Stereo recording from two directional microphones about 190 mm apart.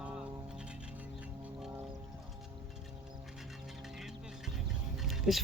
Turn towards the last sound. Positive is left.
turn(degrees=0)  # may be behind; listen again after turning